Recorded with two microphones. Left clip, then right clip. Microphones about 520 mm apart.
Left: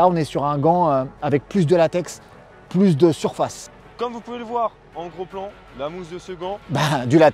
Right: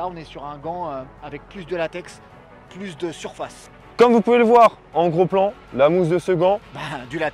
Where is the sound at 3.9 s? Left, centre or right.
Right.